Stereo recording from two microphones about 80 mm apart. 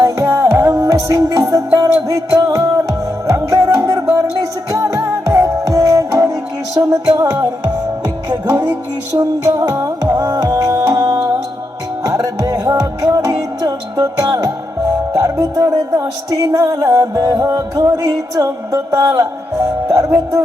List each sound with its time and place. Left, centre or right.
0.0 s music: right